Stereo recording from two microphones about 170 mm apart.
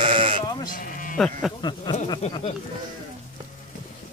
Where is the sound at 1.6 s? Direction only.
25° left (ahead or behind).